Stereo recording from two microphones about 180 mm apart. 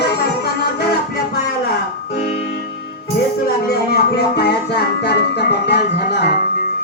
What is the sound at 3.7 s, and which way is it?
Music, 65° left (ahead or behind).